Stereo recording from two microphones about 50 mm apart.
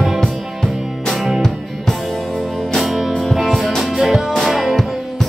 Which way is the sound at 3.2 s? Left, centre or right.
Centre.